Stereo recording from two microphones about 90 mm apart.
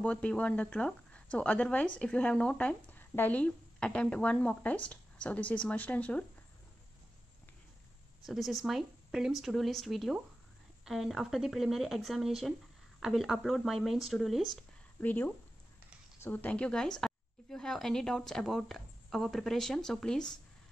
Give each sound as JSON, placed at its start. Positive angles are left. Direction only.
{"t": 0.0, "sound": "speech", "side_deg": 15}
{"t": 8.3, "sound": "a woman's voice", "side_deg": 0}
{"t": 15.0, "sound": "a woman's voice", "side_deg": 20}